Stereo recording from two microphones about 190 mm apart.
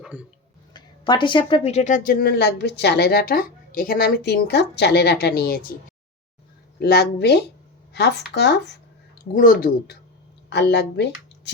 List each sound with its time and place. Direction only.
0.0 s music: 5° right (ahead or behind)
0.7 s a woman's voice: 25° left (ahead or behind); by 5.6 s 55° left (ahead or behind)
6.7 s a woman's voice: 60° left (ahead or behind)
9.3 s speech: 45° left (ahead or behind)
10.5 s speech: 65° left (ahead or behind)